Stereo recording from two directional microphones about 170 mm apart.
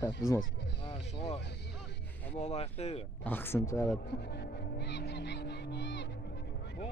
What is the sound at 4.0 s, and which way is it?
Music, 75° left (ahead or behind).